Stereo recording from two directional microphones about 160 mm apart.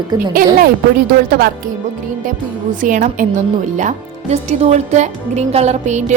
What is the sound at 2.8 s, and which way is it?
A woman's voice, 55° right (ahead or behind).